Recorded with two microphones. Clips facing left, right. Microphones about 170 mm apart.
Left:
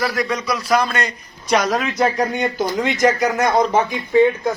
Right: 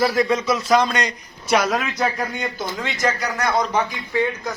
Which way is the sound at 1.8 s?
20° left (ahead or behind).